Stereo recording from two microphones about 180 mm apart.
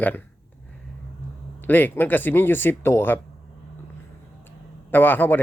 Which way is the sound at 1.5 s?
10° left (ahead or behind).